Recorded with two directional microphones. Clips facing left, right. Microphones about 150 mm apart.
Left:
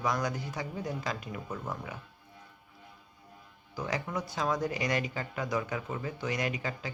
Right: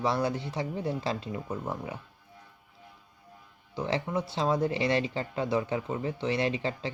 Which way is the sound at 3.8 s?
25° right (ahead or behind).